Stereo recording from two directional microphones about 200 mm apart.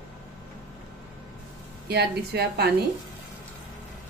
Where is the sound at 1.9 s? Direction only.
55° right (ahead or behind).